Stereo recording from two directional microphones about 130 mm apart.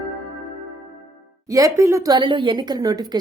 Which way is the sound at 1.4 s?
25° right (ahead or behind).